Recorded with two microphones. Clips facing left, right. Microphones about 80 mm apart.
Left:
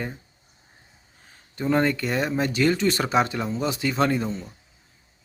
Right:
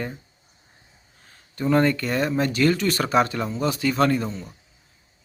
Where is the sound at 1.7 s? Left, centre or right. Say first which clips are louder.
Right 2 dB; centre.